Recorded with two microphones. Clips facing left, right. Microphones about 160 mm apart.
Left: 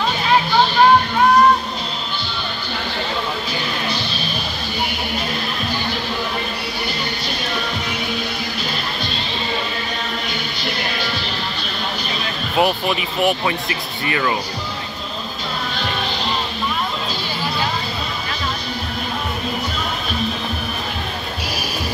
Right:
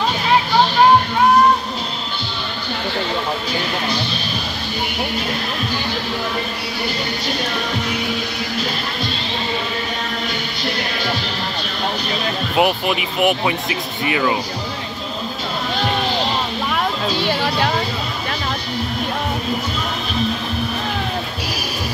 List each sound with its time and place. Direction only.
12.5 s speech: 10° right (ahead or behind)
17.2 s music: 70° right (ahead or behind)